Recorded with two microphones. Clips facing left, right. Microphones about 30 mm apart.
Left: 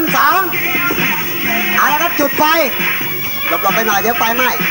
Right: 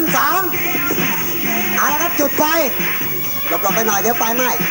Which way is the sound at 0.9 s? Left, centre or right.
Left.